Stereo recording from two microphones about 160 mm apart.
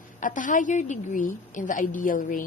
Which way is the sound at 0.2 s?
55° left (ahead or behind).